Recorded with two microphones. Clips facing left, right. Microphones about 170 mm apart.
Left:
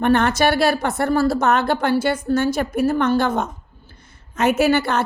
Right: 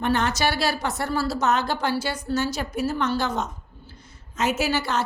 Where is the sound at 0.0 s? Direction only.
55° left (ahead or behind).